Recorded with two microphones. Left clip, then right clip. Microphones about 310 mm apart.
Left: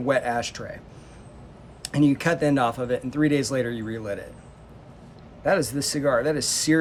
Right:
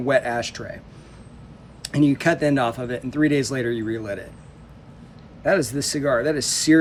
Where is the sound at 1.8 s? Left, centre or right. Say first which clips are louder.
Right 3 dB; centre.